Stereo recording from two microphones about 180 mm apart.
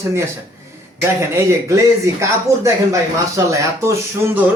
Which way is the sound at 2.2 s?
15° right (ahead or behind).